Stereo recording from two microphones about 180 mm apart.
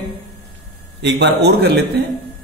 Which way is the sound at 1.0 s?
70° right (ahead or behind).